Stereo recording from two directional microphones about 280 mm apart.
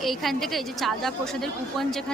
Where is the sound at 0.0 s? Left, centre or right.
Centre.